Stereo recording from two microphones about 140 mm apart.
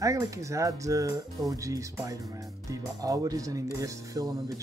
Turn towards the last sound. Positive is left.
turn(degrees=-25)  # may be behind; listen again after turning